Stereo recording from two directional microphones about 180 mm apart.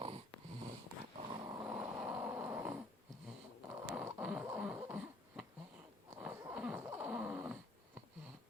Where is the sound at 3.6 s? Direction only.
5° right (ahead or behind).